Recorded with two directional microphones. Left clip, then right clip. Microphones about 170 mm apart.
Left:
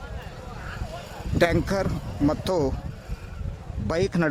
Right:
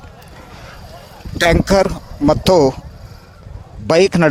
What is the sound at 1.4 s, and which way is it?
Speech, 45° right (ahead or behind).